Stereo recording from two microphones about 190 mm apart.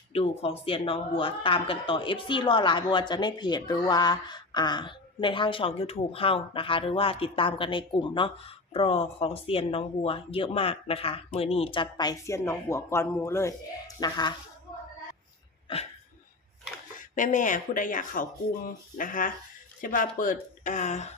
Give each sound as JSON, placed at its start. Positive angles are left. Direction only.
{"t": 0.1, "sound": "speech", "side_deg": 30}
{"t": 16.9, "sound": "speech", "side_deg": 45}